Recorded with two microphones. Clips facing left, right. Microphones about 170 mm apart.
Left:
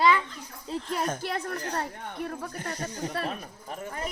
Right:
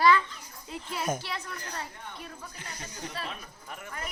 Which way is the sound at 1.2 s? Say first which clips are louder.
Left 7 dB; 50° left (ahead or behind).